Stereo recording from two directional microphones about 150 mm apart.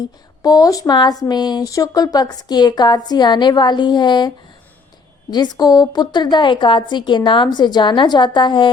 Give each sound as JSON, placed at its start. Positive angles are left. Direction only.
{"t": 0.4, "sound": "speech", "side_deg": 25}
{"t": 5.3, "sound": "speech", "side_deg": 25}